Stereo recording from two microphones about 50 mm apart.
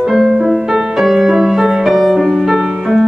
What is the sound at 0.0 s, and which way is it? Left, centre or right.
Music, centre.